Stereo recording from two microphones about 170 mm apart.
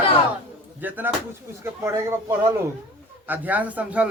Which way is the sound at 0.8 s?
10° right (ahead or behind).